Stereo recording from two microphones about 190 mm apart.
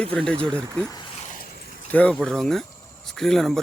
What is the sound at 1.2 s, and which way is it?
Vehicle, 45° left (ahead or behind).